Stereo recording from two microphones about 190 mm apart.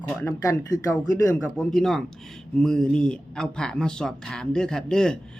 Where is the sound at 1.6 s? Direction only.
5° left (ahead or behind).